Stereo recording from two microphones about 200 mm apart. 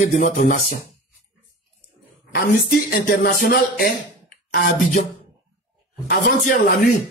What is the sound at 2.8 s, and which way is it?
Music, 55° left (ahead or behind).